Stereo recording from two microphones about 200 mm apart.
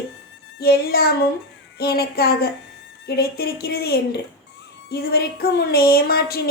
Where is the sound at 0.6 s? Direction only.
50° left (ahead or behind).